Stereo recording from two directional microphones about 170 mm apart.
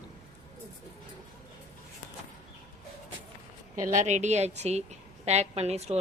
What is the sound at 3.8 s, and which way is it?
A woman's voice, 45° right (ahead or behind).